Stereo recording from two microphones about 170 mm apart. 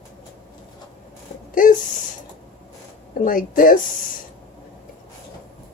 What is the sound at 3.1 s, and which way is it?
Speech, 55° left (ahead or behind).